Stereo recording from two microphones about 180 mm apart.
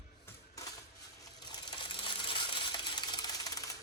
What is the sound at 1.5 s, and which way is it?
Coin, 25° left (ahead or behind).